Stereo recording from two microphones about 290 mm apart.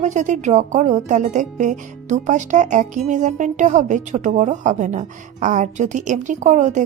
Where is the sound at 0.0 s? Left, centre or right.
Right.